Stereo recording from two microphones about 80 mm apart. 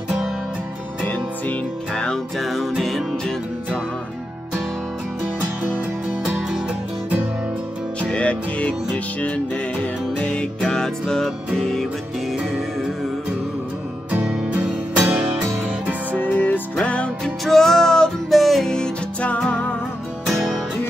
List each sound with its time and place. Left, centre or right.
1.5 s music: centre
8.0 s music: centre
10.1 s music: centre
14.2 s music: centre
16.2 s music: left